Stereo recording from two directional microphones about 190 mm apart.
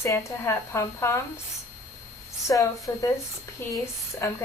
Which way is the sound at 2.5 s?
20° left (ahead or behind).